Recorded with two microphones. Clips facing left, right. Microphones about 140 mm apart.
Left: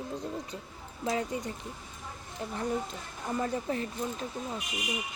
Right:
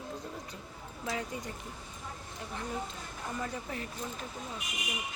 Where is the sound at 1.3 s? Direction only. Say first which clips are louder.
Left 5 dB; 20° left (ahead or behind).